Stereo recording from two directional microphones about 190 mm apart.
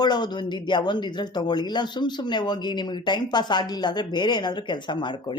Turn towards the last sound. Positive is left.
turn(degrees=25)  # may be behind; listen again after turning